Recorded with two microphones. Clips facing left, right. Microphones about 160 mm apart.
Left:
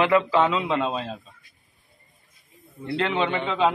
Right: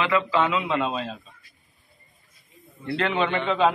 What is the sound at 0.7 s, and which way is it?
Speech, 20° left (ahead or behind).